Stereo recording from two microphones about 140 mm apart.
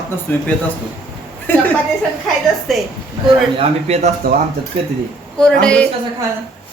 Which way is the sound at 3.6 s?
50° right (ahead or behind).